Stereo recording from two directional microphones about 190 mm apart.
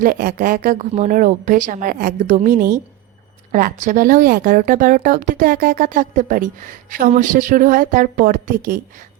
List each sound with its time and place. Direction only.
0.0 s speech: 45° right (ahead or behind)